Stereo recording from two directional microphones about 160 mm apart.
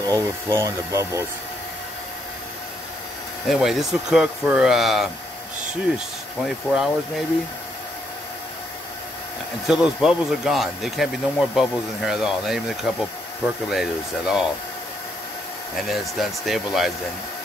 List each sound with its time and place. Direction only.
0.1 s speech: 20° right (ahead or behind)
3.4 s speech: centre (ahead or behind)
9.7 s speech: 5° right (ahead or behind)
15.7 s speech: centre (ahead or behind)